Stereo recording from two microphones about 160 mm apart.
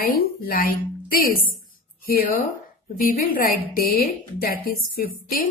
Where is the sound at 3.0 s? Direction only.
60° left (ahead or behind).